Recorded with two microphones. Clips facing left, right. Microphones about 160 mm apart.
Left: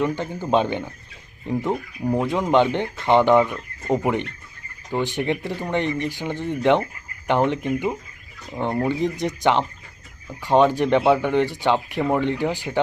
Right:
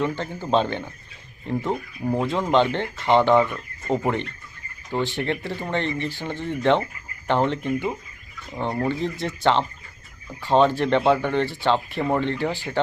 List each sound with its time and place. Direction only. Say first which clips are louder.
0.0 s speech: left 2 dB; 15° left (ahead or behind)